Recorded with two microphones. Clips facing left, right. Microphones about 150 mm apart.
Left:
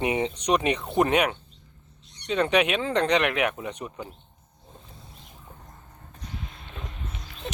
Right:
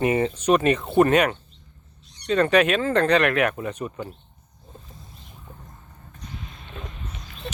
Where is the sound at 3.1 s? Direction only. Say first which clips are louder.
Right 4 dB; 10° left (ahead or behind).